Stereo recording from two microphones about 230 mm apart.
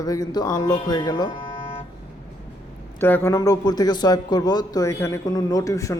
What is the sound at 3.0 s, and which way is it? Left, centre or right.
Speech, centre.